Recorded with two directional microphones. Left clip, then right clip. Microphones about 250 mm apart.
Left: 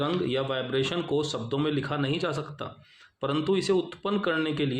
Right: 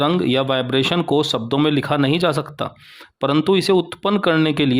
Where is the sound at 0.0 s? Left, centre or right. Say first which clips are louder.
Right 10 dB; right.